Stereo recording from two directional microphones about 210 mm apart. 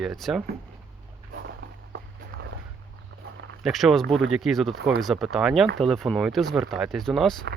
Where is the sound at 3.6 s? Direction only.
Centre (ahead or behind).